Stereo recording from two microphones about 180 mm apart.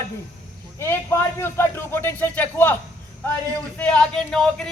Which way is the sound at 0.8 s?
15° left (ahead or behind).